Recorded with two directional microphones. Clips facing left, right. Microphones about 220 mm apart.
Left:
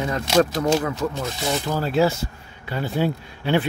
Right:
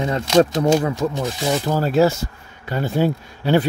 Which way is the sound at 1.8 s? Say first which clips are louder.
Right 3 dB; 45° right (ahead or behind).